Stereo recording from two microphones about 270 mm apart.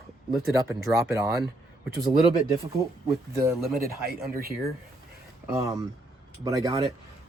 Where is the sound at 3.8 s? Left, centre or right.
Right.